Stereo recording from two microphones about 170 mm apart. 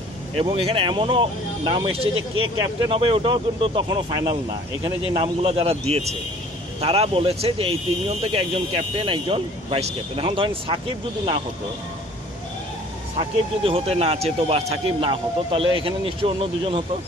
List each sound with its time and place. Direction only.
0.4 s speech: 35° right (ahead or behind)
13.7 s speech: 35° right (ahead or behind)